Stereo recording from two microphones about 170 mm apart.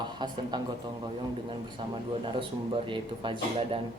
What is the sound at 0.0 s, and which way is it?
Speech, 25° right (ahead or behind).